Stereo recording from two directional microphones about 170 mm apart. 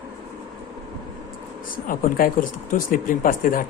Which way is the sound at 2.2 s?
60° left (ahead or behind).